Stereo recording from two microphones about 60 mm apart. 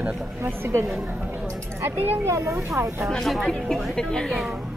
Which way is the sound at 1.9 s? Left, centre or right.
Right.